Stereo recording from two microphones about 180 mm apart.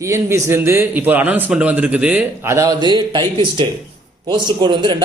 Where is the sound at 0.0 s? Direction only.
15° right (ahead or behind).